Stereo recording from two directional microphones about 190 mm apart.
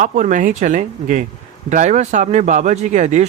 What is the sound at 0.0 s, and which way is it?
Speech, 45° right (ahead or behind).